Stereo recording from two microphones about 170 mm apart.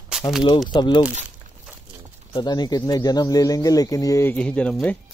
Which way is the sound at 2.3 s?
25° left (ahead or behind).